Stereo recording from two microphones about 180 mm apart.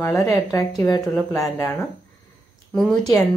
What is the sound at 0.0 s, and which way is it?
A woman's voice, 20° left (ahead or behind).